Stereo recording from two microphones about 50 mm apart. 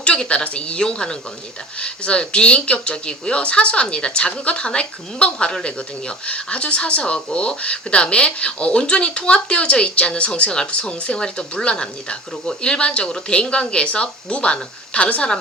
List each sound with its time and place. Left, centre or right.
0.0 s a woman's voice: left